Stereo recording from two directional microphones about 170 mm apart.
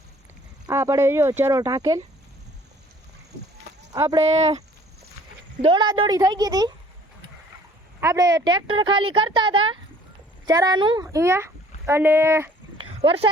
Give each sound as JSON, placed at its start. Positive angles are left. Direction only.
{"t": 0.7, "sound": "speech", "side_deg": -15}
{"t": 3.9, "sound": "speech", "side_deg": -20}
{"t": 4.2, "sound": "speech", "side_deg": -40}
{"t": 5.6, "sound": "a woman's voice", "side_deg": -25}
{"t": 8.0, "sound": "a woman's voice", "side_deg": -20}
{"t": 13.0, "sound": "speech", "side_deg": -35}